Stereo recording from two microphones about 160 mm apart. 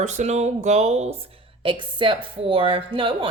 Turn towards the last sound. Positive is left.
turn(degrees=-30)  # may be behind; listen again after turning